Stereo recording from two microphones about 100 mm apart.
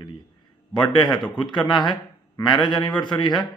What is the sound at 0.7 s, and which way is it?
A man's voice, 50° left (ahead or behind).